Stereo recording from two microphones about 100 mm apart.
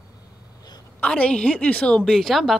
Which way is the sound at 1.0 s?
10° left (ahead or behind).